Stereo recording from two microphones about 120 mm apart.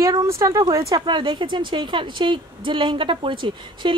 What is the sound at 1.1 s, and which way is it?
Speech, 40° right (ahead or behind).